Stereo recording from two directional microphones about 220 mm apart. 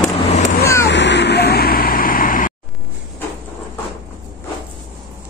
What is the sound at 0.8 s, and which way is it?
Vehicle, 55° left (ahead or behind).